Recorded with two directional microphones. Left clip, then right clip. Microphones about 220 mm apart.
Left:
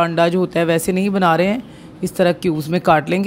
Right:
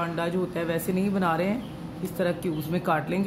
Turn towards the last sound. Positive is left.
turn(degrees=45)  # may be behind; listen again after turning